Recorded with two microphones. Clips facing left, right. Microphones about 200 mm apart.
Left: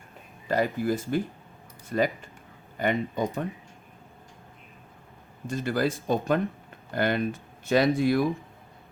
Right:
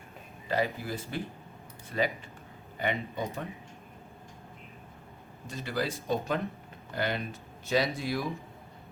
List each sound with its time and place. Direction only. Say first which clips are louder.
0.4 s speech: left 5 dB; 45° left (ahead or behind)
5.5 s speech: left 7 dB; 50° left (ahead or behind)